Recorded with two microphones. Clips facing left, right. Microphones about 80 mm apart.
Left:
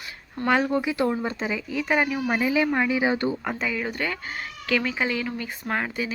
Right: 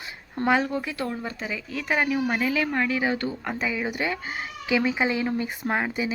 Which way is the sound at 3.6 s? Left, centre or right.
Centre.